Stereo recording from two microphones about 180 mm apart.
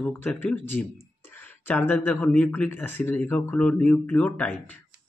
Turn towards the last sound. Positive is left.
turn(degrees=10)  # may be behind; listen again after turning